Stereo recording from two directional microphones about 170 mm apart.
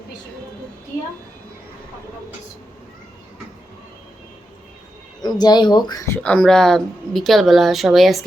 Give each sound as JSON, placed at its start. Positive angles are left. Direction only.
{"t": 5.2, "sound": "speech", "side_deg": 25}
{"t": 6.2, "sound": "speech", "side_deg": 5}